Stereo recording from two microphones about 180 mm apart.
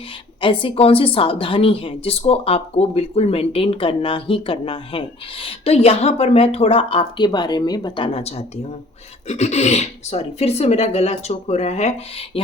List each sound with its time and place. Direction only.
0.4 s a woman's voice: 30° left (ahead or behind)